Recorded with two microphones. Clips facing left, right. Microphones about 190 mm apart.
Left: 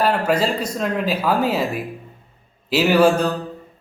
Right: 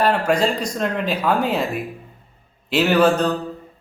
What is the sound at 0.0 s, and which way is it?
A man's voice, 5° left (ahead or behind).